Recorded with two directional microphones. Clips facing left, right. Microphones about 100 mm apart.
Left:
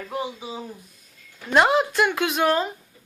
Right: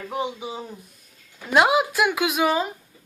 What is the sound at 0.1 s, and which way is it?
Speech, 20° right (ahead or behind).